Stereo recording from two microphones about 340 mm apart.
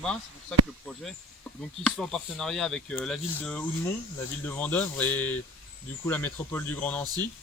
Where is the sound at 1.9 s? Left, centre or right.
Centre.